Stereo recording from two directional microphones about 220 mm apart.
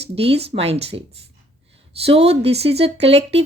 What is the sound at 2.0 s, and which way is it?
A woman's voice, 25° right (ahead or behind).